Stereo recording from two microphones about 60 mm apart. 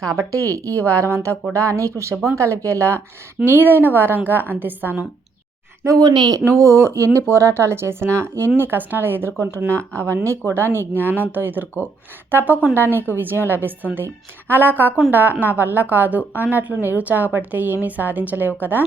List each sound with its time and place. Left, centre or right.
0.2 s speech: right
1.5 s speech: right
3.4 s a woman's voice: right
5.8 s a woman's voice: right